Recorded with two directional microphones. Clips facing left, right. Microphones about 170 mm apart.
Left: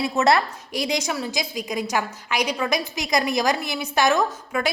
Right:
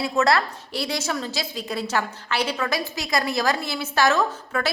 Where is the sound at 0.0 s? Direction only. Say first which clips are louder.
Left 1 dB; 20° left (ahead or behind).